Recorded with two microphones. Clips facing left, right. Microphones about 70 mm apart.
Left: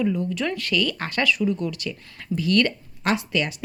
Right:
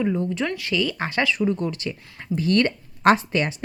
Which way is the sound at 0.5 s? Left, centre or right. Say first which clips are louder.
Even; centre.